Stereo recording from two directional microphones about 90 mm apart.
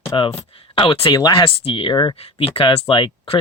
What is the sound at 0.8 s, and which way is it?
Speech, 90° left.